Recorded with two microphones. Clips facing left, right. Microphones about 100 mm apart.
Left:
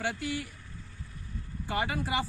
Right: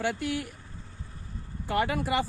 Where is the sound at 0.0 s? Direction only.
55° right (ahead or behind).